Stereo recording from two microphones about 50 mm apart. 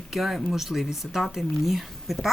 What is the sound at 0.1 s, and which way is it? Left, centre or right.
Speech, centre.